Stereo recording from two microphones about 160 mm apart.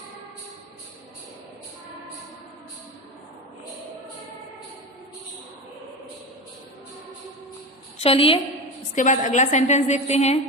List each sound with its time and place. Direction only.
7.9 s a woman's voice: 35° left (ahead or behind)
9.0 s a woman's voice: 50° left (ahead or behind)